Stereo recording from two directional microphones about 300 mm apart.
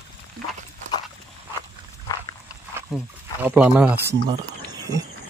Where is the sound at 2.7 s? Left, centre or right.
Centre.